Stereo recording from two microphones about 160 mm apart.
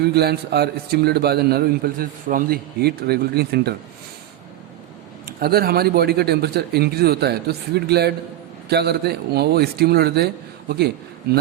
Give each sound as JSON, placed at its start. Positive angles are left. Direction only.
{"t": 0.0, "sound": "a man's voice", "side_deg": -90}
{"t": 5.2, "sound": "a man's voice", "side_deg": -75}